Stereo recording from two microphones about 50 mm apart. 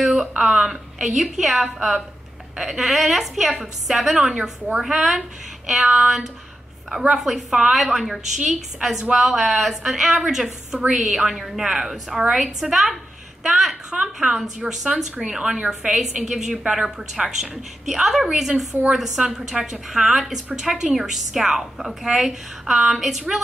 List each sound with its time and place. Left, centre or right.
0.0 s a sound: centre
0.4 s a woman's voice: centre
4.3 s a woman's voice: centre
6.9 s a woman's voice: centre
7.2 s a woman's voice: centre
13.9 s a woman's voice: centre